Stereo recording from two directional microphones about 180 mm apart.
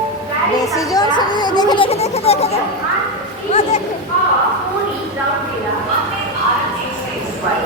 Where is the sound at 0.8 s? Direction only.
20° left (ahead or behind).